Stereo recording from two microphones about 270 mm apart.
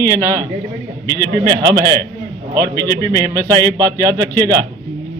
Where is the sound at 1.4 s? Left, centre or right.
Centre.